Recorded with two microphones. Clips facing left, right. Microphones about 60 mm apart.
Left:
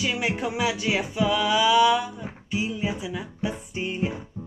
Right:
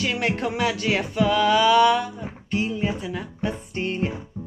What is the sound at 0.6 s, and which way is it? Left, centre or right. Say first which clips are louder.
Male singing: right 1 dB; right.